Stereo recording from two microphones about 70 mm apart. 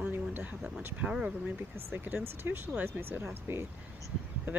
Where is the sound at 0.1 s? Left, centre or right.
Right.